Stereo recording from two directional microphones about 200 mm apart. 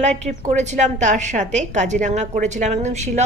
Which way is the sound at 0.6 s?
35° right (ahead or behind).